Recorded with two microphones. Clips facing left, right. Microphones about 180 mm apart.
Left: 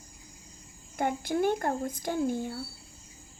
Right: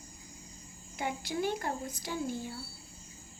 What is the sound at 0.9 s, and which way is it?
Speech, 50° left (ahead or behind).